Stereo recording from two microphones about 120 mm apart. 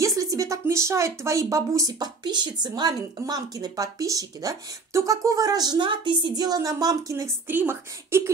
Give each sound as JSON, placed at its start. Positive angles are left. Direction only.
{"t": 0.0, "sound": "speech", "side_deg": -30}